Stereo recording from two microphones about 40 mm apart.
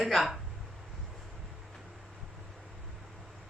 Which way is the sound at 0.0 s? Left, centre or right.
Centre.